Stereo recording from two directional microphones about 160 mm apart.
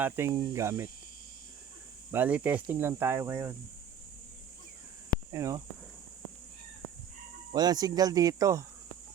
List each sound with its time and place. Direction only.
0.0 s speech: 15° right (ahead or behind)
2.1 s speech: 10° right (ahead or behind)
5.3 s speech: 20° right (ahead or behind)
7.5 s speech: 25° right (ahead or behind)